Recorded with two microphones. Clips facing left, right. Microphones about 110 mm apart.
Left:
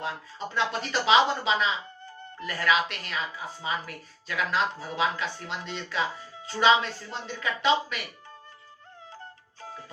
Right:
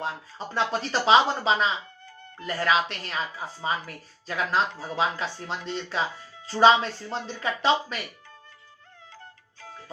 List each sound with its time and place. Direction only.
0.0 s speech: 35° right (ahead or behind)
9.1 s music: 30° left (ahead or behind)